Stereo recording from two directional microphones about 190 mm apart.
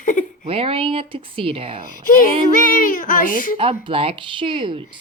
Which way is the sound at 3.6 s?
30° right (ahead or behind).